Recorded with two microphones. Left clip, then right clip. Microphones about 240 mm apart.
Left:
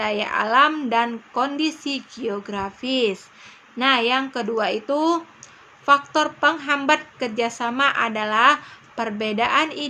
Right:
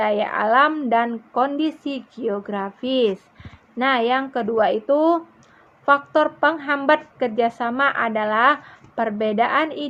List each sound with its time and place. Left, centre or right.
0.0 s a woman's voice: centre